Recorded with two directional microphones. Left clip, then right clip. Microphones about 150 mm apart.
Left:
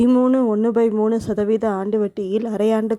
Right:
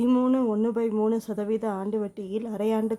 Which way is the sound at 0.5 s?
40° left (ahead or behind).